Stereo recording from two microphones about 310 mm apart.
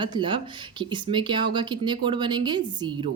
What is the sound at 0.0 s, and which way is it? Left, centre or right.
Speech, centre.